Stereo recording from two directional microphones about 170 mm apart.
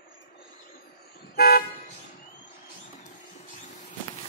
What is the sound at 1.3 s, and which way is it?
Car, 65° left (ahead or behind).